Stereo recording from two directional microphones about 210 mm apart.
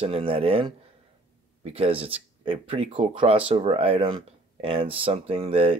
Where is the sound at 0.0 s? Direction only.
25° right (ahead or behind).